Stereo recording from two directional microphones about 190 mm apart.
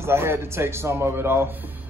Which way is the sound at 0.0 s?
15° right (ahead or behind).